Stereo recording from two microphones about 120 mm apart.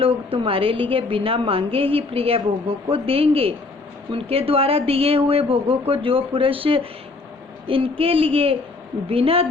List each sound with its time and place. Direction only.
0.0 s a woman's voice: 50° right (ahead or behind)